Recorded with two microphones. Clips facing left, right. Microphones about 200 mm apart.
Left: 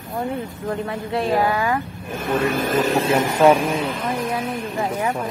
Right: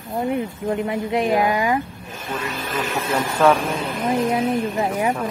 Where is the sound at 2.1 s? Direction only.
60° left (ahead or behind); by 3.2 s 30° left (ahead or behind).